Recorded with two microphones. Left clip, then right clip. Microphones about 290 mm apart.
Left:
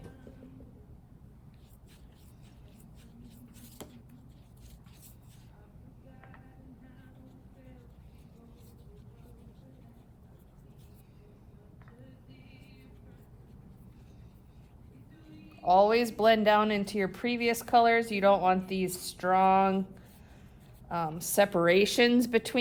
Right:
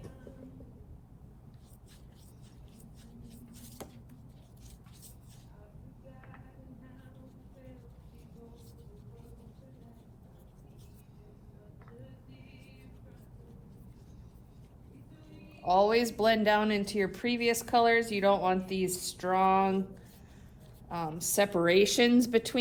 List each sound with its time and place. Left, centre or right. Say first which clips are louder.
3.2 s a sound: right 2 dB; centre
15.6 s speech: left 2 dB; left
20.8 s speech: left 2 dB; left